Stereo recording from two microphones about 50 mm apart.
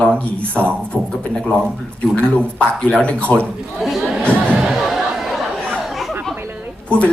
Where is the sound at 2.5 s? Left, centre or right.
Left.